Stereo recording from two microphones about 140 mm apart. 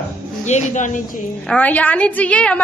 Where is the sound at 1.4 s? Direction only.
10° left (ahead or behind).